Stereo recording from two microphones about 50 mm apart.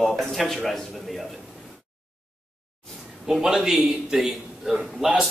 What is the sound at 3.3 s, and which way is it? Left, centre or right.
A man's voice, centre.